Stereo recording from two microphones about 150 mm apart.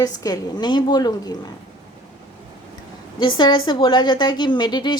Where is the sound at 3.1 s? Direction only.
30° left (ahead or behind).